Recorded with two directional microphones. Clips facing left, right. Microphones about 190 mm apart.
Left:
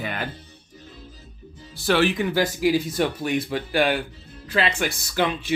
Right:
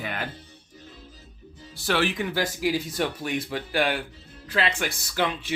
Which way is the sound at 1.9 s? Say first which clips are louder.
Left 5 dB; 15° left (ahead or behind).